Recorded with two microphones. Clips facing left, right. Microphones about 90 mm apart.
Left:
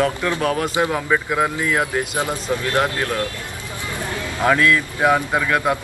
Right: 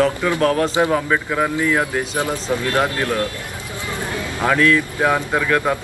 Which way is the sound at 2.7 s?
15° right (ahead or behind).